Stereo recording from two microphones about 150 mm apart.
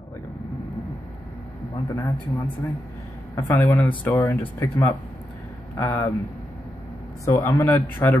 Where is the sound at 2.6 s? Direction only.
15° left (ahead or behind).